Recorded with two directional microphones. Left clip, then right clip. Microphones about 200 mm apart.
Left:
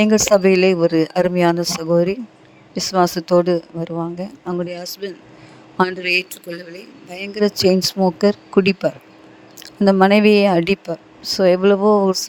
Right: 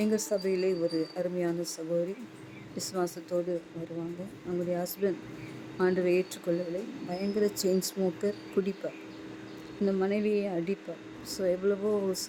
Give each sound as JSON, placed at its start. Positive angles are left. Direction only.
{"t": 0.0, "sound": "speech", "side_deg": 45}
{"t": 6.5, "sound": "speech", "side_deg": 0}
{"t": 7.2, "sound": "speech", "side_deg": 45}
{"t": 9.8, "sound": "speech", "side_deg": 55}